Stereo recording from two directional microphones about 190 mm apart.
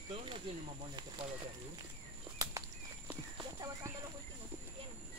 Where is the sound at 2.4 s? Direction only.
15° right (ahead or behind).